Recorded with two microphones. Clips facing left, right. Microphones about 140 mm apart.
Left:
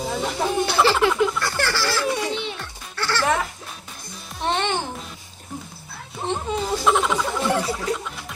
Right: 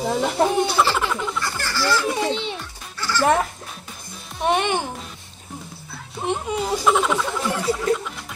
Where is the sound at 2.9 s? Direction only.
70° left (ahead or behind).